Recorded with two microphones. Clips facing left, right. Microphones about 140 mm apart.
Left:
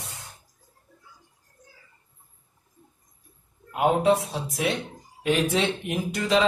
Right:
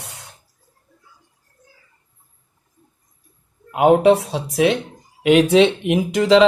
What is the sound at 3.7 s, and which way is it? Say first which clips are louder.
Speech: right 8 dB; 80° right.